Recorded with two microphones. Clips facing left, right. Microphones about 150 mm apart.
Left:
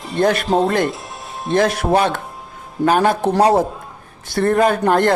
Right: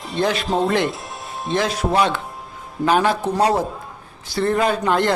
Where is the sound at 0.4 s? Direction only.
Centre (ahead or behind).